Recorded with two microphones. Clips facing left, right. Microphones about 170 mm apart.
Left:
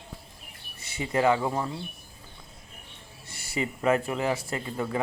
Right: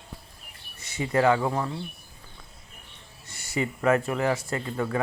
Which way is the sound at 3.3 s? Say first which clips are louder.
Right 2 dB; 30° left (ahead or behind).